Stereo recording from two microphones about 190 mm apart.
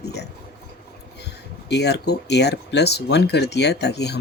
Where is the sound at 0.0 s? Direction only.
60° left (ahead or behind).